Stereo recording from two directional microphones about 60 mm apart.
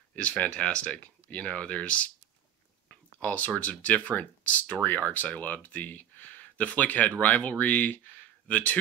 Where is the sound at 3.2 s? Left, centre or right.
Left.